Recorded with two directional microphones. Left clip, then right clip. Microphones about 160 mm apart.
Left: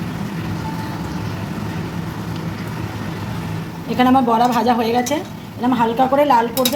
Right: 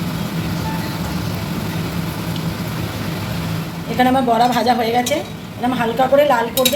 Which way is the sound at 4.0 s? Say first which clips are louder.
Even; 60° left (ahead or behind).